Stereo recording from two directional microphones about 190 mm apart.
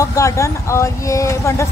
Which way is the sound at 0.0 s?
15° left (ahead or behind).